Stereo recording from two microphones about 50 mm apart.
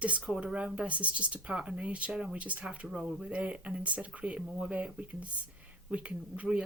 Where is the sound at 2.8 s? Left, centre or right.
Centre.